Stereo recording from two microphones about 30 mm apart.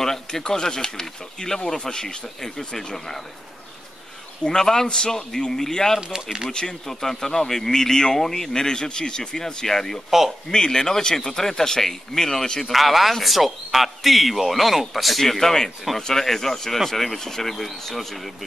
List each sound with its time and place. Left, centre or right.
0.0 s speech: centre
4.5 s speech: centre
12.7 s speech: centre